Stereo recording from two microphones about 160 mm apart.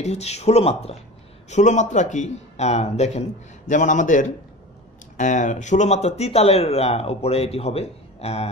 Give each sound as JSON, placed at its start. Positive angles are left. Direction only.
{"t": 0.0, "sound": "speech", "side_deg": 40}